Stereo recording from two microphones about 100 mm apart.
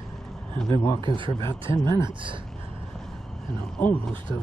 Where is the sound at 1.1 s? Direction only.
60° right (ahead or behind).